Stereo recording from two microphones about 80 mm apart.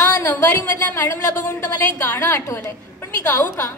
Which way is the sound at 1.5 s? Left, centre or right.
Left.